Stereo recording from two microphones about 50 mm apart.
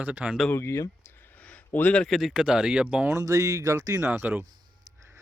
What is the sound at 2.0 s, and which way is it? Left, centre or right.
Speech, centre.